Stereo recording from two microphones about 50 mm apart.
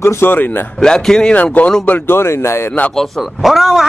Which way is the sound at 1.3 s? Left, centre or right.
Left.